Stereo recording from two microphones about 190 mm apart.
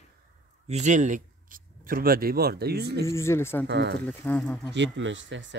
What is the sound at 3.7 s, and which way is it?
Speech, 65° right (ahead or behind).